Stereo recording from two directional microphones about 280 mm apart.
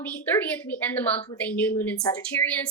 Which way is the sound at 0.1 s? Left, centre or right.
Centre.